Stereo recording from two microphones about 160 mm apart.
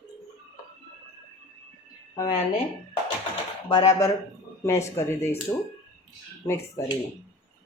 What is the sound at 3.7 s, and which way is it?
Speech, 25° left (ahead or behind).